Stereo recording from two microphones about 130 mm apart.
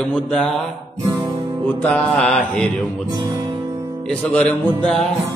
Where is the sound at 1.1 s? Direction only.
30° right (ahead or behind).